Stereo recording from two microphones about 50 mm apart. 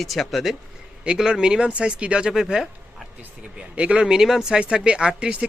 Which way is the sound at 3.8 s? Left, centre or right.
Right.